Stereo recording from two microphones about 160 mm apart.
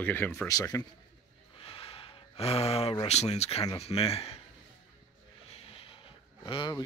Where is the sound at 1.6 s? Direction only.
35° left (ahead or behind).